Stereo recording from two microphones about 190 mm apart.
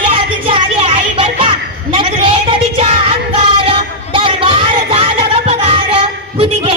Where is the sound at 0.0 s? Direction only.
30° right (ahead or behind).